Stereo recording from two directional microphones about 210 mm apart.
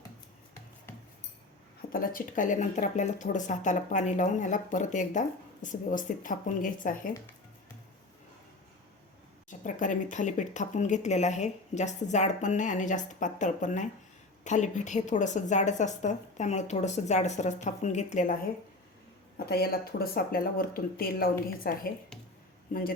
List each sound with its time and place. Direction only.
0.9 s cutlery: 10° left (ahead or behind)
1.9 s speech: 45° left (ahead or behind)
9.5 s speech: 35° left (ahead or behind)
19.5 s speech: 50° left (ahead or behind)